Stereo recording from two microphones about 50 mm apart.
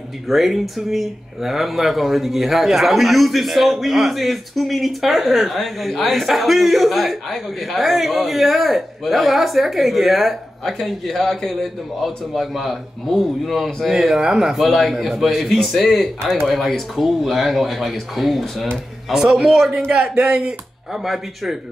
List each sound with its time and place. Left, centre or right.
0.3 s speech: centre